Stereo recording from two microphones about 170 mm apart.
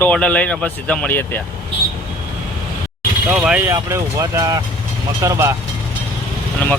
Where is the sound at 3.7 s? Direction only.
20° right (ahead or behind).